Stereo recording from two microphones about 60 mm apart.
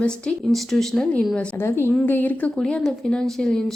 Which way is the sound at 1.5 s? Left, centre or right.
Left.